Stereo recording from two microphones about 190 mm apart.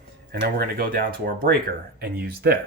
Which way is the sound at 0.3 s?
50° right (ahead or behind).